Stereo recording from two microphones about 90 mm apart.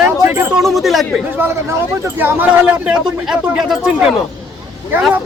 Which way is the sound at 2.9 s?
10° right (ahead or behind).